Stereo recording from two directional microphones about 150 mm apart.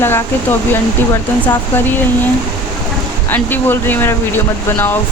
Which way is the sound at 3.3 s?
15° left (ahead or behind).